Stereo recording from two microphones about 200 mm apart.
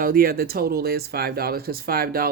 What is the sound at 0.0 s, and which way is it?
Speech, 45° right (ahead or behind).